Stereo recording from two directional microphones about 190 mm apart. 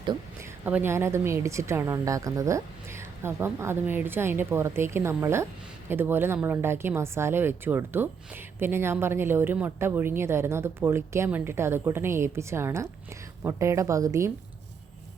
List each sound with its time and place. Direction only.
0.6 s a woman's voice: 10° right (ahead or behind)